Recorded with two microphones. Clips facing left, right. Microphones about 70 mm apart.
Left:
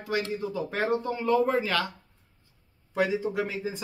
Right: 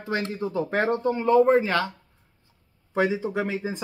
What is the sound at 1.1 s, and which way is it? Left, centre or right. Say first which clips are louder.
Speech: right 8 dB; right.